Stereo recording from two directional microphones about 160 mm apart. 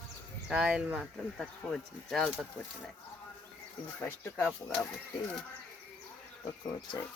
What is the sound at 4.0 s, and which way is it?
Speech, 10° left (ahead or behind).